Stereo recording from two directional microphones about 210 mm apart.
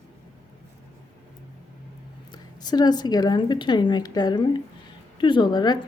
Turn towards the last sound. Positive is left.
turn(degrees=20)  # may be behind; listen again after turning